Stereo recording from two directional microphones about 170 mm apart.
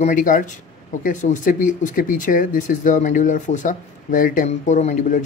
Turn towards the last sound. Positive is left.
turn(degrees=50)  # may be behind; listen again after turning